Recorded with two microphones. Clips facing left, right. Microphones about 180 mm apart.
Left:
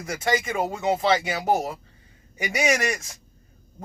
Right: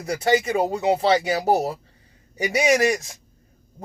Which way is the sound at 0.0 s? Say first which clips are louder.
Right 5 dB; 35° right (ahead or behind).